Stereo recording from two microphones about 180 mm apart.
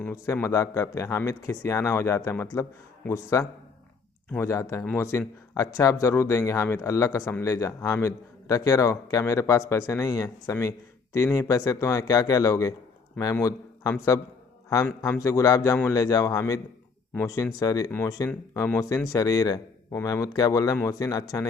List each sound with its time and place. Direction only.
0.0 s a man's voice: 10° left (ahead or behind)